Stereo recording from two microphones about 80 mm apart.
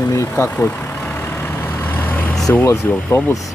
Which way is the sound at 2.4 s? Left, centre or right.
Left.